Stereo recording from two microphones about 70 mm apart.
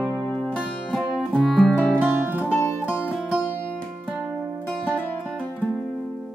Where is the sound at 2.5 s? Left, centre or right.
Left.